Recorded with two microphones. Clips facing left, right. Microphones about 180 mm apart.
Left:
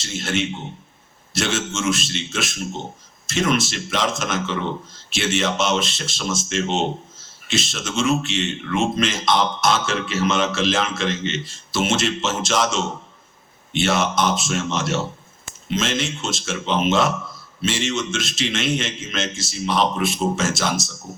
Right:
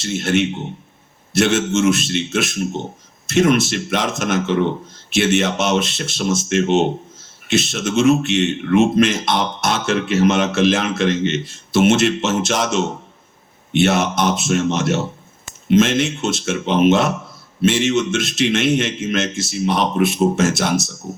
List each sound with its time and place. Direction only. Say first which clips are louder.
0.0 s speech: right 6 dB; 60° right (ahead or behind)